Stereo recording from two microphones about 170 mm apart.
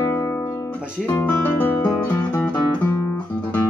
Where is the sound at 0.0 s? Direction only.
15° left (ahead or behind).